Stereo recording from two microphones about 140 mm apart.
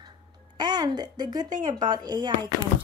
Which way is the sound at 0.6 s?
30° right (ahead or behind).